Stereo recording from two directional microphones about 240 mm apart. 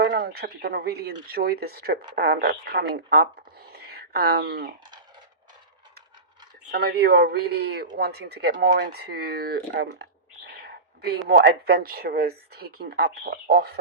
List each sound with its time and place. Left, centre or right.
0.0 s speech: right
3.7 s a sound: right
6.7 s speech: right